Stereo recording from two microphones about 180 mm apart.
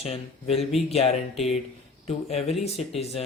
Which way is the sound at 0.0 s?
35° left (ahead or behind).